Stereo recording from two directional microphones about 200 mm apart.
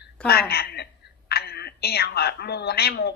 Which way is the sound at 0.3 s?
50° left (ahead or behind).